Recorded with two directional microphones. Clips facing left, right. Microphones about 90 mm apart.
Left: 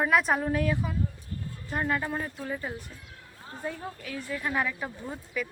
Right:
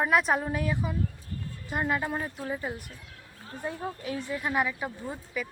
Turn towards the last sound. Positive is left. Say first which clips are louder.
# even
turn(degrees=-5)  # may be behind; listen again after turning